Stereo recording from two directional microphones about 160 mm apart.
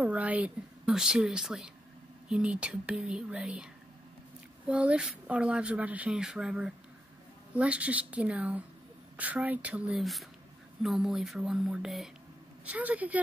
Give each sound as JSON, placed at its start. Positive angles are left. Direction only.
{"t": 0.0, "sound": "a woman's voice", "side_deg": -10}